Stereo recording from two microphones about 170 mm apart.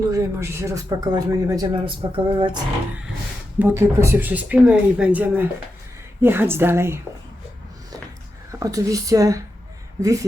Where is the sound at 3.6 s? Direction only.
15° right (ahead or behind).